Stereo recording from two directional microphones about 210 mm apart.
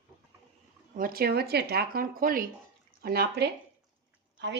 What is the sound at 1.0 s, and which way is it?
Speech, 45° right (ahead or behind).